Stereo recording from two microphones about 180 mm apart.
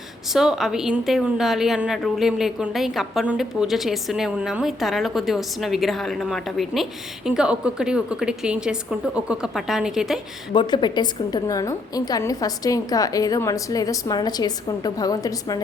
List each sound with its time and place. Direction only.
0.3 s a woman's voice: centre (ahead or behind)
10.5 s a woman's voice: 25° left (ahead or behind)